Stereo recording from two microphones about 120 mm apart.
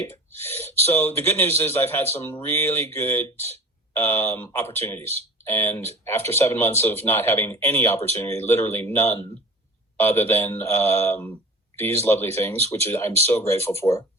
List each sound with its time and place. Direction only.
0.4 s a man's voice: 20° left (ahead or behind)